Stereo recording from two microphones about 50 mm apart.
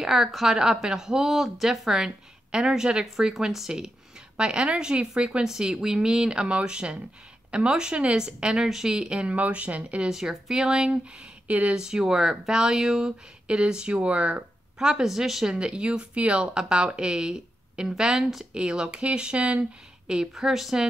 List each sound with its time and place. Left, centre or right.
0.0 s speech: centre; by 10.0 s right
10.0 s speech: centre
11.4 s speech: right
11.7 s speech: centre
13.9 s speech: right
14.8 s speech: centre
18.5 s speech: centre
20.3 s speech: centre